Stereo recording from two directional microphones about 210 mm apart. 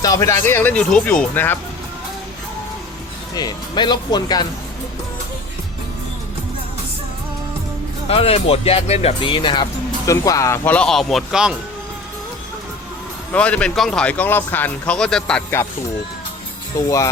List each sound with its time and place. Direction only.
0.0 s speech: 15° left (ahead or behind)
3.3 s speech: 20° left (ahead or behind)
8.0 s speech: 30° left (ahead or behind); by 11.5 s centre (ahead or behind)
13.3 s speech: 5° left (ahead or behind)